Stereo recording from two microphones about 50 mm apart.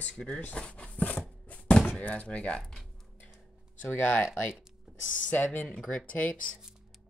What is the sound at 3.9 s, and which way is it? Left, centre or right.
Speech, left.